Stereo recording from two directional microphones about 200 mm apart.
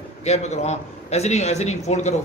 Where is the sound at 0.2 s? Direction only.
35° left (ahead or behind).